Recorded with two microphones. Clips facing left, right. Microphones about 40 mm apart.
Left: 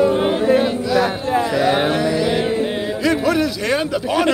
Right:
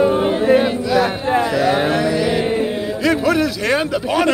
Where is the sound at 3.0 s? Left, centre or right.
Centre.